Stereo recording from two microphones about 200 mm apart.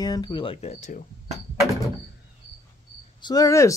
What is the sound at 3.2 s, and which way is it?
Speech, 15° left (ahead or behind).